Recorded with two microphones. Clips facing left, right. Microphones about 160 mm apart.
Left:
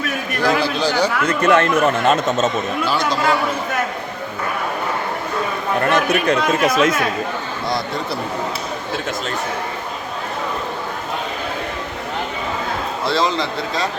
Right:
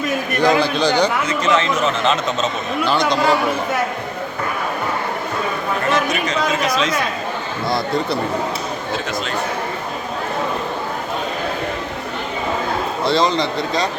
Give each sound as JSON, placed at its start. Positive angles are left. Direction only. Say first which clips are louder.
{"t": 0.4, "sound": "a man's voice", "louder": "right 2 dB", "side_deg": 5}
{"t": 1.3, "sound": "speech", "louder": "left 3 dB", "side_deg": 55}
{"t": 2.8, "sound": "a man's voice", "louder": "right 5 dB", "side_deg": 5}
{"t": 5.9, "sound": "speech", "louder": "left 3 dB", "side_deg": 60}
{"t": 13.1, "sound": "a man's voice", "louder": "right 2 dB", "side_deg": 0}